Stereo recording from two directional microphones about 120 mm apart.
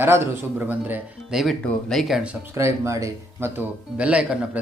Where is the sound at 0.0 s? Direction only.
20° right (ahead or behind).